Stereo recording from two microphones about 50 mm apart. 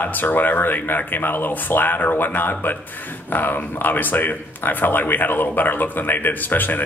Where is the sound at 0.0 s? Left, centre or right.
Left.